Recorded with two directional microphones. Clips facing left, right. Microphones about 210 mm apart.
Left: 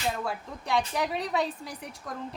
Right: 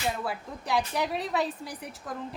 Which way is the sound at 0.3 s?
Centre (ahead or behind).